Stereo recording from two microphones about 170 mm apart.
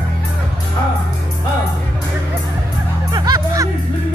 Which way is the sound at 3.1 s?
20° right (ahead or behind).